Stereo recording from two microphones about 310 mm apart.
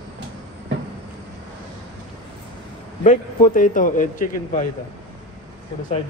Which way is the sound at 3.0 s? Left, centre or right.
Left.